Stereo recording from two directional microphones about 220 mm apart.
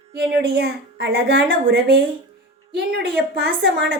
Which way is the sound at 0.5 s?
50° right (ahead or behind).